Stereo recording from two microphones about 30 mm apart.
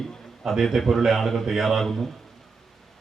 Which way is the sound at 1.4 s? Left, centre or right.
Centre.